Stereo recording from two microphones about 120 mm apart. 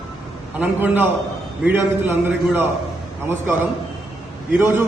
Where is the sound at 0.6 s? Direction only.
15° right (ahead or behind).